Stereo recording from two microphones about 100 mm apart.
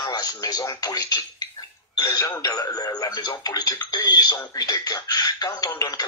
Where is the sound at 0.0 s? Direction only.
40° left (ahead or behind).